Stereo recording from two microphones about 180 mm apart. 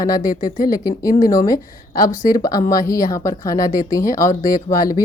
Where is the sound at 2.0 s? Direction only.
50° left (ahead or behind).